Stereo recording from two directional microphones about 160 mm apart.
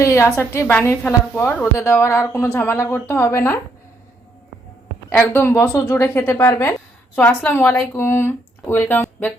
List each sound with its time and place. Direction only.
0.0 s a woman's voice: 20° left (ahead or behind)
5.0 s a woman's voice: 15° left (ahead or behind)